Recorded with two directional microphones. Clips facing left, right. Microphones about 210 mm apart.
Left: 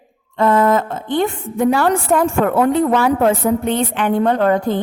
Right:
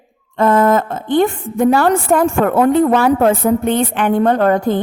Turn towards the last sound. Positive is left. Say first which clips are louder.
# right 2 dB
turn(degrees=-50)  # may be behind; listen again after turning